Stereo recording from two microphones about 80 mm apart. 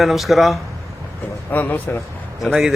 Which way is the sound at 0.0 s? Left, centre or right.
Centre.